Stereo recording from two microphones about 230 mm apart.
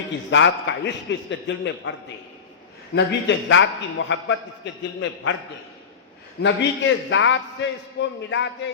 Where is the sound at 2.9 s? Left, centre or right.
Left.